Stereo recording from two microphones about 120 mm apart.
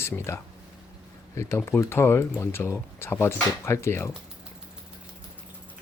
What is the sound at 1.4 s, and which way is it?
Speech, 25° left (ahead or behind).